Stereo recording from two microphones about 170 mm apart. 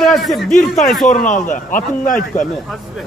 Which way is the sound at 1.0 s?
50° left (ahead or behind).